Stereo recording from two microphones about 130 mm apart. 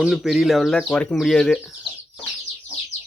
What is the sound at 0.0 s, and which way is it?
Speech, centre (ahead or behind).